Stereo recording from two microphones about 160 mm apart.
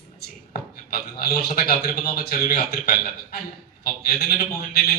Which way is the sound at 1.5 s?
70° left (ahead or behind).